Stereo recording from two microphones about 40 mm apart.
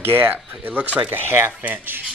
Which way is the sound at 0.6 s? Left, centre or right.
Right.